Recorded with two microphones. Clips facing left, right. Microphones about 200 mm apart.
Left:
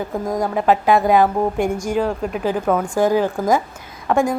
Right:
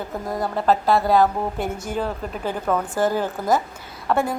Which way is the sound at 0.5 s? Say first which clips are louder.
Left 3 dB; 15° left (ahead or behind).